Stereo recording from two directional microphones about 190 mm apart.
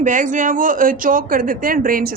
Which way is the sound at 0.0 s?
40° right (ahead or behind).